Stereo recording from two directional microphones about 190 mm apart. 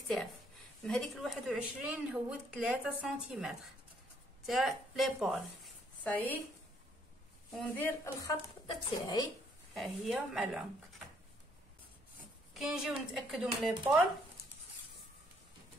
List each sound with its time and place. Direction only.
0.8 s a woman's voice: centre (ahead or behind)
6.0 s speech: 10° left (ahead or behind)
8.0 s speech: 15° left (ahead or behind)
9.8 s a woman's voice: centre (ahead or behind)
12.5 s a woman's voice: centre (ahead or behind)